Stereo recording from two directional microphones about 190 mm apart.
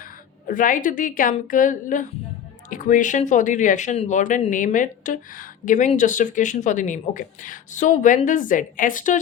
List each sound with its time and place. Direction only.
0.4 s speech: 45° left (ahead or behind)